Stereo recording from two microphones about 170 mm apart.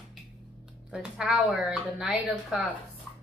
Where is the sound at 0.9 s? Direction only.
5° right (ahead or behind).